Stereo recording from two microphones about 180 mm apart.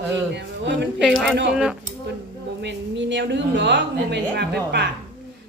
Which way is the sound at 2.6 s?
80° right.